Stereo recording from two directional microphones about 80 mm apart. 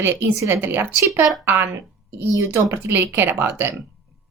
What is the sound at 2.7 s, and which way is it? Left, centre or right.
Speech, right.